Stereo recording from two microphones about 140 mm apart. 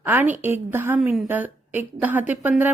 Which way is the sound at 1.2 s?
15° right (ahead or behind).